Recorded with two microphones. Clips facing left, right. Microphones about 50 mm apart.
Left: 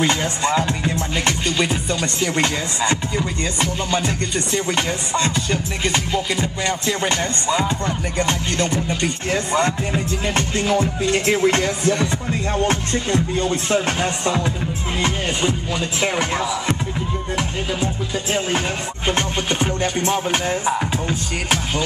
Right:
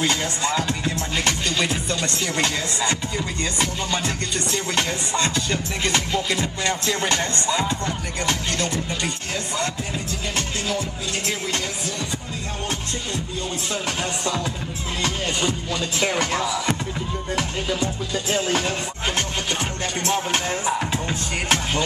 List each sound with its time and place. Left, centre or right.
0.0 s music: left
9.3 s speech: left
13.9 s music: left
21.1 s music: centre